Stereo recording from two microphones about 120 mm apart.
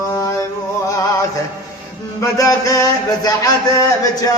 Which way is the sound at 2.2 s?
30° left (ahead or behind).